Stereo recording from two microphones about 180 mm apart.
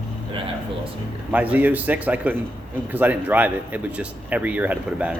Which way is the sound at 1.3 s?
10° right (ahead or behind).